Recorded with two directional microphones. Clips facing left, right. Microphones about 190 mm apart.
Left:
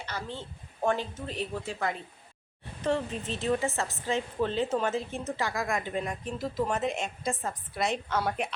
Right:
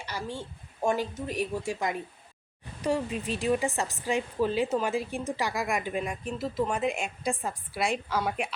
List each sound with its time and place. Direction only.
0.0 s a woman's voice: 10° right (ahead or behind)